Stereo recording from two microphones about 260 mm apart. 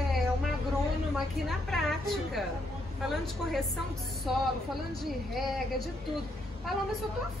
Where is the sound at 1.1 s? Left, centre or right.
Centre.